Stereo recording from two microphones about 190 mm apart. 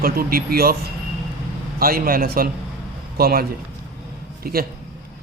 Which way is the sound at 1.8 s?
50° right (ahead or behind).